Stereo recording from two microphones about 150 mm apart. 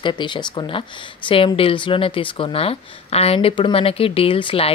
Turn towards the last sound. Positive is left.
turn(degrees=40)  # may be behind; listen again after turning